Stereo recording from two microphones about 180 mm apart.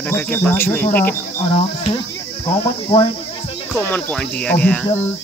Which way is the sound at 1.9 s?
25° left (ahead or behind).